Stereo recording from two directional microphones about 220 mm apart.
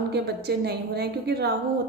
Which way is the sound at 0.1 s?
50° right (ahead or behind).